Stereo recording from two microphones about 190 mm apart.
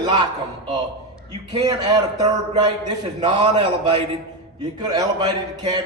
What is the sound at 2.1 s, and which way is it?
A man's voice, 20° right (ahead or behind).